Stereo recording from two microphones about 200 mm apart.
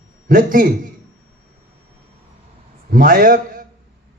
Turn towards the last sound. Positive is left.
turn(degrees=-45)  # may be behind; listen again after turning